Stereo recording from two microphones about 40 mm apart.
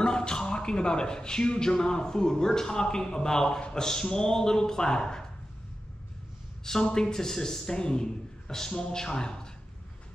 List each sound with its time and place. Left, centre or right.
0.0 s speech: left
6.6 s speech: centre